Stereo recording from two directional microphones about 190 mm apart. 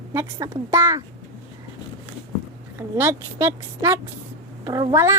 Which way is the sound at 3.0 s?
10° right (ahead or behind).